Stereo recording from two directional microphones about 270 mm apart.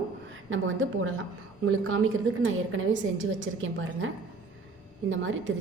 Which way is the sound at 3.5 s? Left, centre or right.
Right.